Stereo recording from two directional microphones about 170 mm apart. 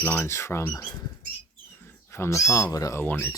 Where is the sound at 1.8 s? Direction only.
15° left (ahead or behind).